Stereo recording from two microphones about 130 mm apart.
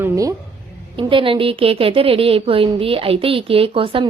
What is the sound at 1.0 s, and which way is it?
A woman's voice, 40° right (ahead or behind).